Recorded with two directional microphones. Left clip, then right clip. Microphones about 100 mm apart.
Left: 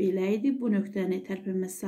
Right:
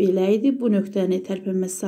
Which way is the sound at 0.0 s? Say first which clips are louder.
Right 8 dB; 35° right (ahead or behind).